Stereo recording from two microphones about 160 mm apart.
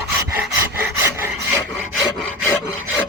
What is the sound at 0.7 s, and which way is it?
Rub, 15° right (ahead or behind).